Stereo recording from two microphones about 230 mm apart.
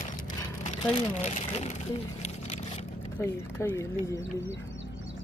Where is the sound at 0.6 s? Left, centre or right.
Left.